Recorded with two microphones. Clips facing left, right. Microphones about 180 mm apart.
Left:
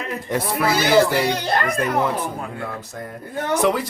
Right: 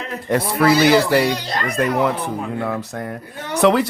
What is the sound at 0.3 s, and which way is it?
Speech, 65° right (ahead or behind).